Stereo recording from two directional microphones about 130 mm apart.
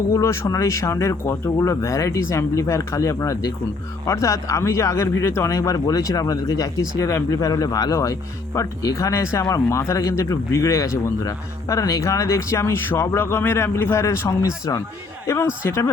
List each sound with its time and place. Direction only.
0.1 s speech: 25° left (ahead or behind)